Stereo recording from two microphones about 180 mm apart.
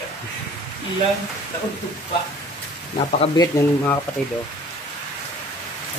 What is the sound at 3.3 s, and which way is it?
Speech, 20° left (ahead or behind).